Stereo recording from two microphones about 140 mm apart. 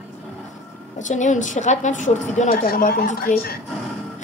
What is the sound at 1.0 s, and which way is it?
A woman's voice, 60° left (ahead or behind).